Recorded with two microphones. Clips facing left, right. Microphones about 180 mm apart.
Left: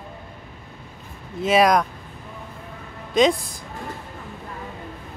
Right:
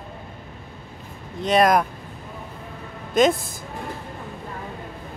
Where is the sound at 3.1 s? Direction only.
Centre (ahead or behind).